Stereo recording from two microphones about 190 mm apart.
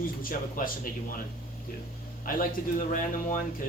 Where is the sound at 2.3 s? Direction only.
50° left (ahead or behind).